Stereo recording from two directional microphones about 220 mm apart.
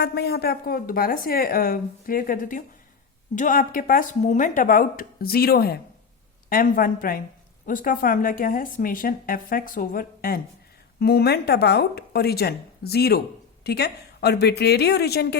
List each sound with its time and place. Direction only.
0.0 s a woman's voice: 50° left (ahead or behind)